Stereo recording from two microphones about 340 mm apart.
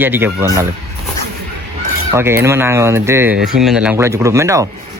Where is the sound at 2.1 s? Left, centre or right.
Centre.